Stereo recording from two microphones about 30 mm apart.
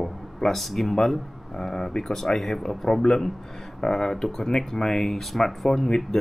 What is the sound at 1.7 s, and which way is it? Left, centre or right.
Speech, left.